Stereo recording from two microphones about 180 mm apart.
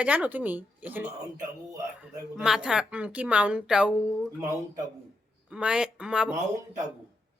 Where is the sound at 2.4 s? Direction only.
5° right (ahead or behind).